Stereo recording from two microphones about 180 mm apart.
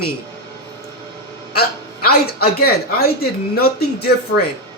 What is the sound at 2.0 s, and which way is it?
Speech, 60° left (ahead or behind).